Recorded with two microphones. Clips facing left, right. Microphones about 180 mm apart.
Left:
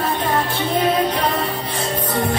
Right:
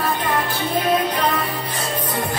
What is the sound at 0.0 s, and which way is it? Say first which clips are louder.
Music: left 1 dB; 25° left (ahead or behind).